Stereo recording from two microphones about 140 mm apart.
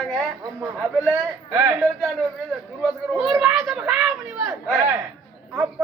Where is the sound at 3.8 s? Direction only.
5° right (ahead or behind).